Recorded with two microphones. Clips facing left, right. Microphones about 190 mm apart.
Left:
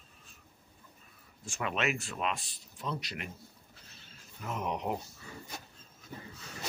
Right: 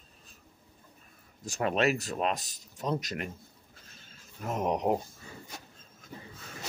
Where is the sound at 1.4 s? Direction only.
40° right (ahead or behind).